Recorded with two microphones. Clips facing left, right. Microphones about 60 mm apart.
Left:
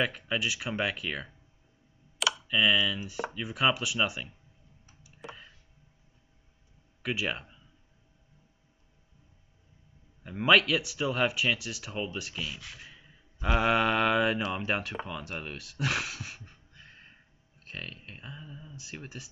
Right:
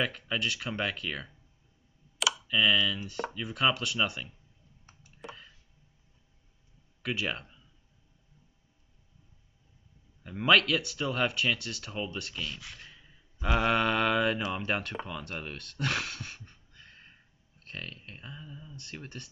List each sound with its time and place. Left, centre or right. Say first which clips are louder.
0.0 s speech: left 1 dB; centre
2.3 s speech: even; centre
5.2 s a sound: even; centre
7.0 s speech: left 1 dB; centre
10.2 s speech: left 1 dB; centre